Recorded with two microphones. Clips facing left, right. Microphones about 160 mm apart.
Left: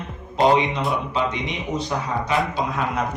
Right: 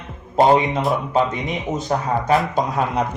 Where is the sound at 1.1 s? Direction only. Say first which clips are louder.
Right 4 dB; 45° right (ahead or behind).